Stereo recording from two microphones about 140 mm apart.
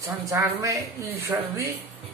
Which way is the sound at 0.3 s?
20° right (ahead or behind).